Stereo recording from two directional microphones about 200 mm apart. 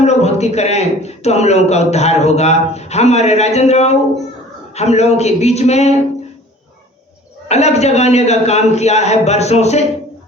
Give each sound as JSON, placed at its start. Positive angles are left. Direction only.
{"t": 0.0, "sound": "a man's voice", "side_deg": 35}
{"t": 7.4, "sound": "a man's voice", "side_deg": 35}